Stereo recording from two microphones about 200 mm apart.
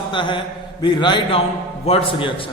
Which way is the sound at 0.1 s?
25° left (ahead or behind).